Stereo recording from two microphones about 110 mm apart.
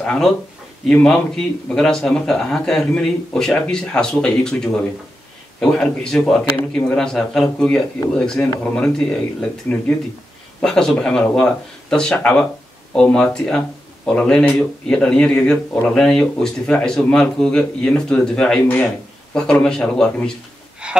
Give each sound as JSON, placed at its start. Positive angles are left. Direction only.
{"t": 0.0, "sound": "a man's voice", "side_deg": 10}
{"t": 20.8, "sound": "speech", "side_deg": -10}